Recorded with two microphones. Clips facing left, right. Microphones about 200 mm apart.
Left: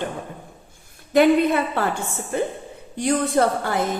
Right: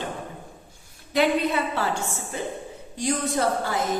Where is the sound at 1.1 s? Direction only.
50° left (ahead or behind).